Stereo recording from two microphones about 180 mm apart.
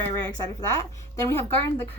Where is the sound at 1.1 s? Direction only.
15° left (ahead or behind).